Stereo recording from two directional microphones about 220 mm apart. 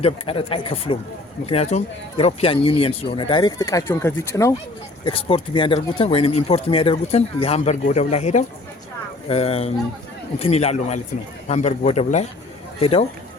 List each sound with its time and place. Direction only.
0.0 s speech: 25° left (ahead or behind)
5.0 s speech: 25° left (ahead or behind)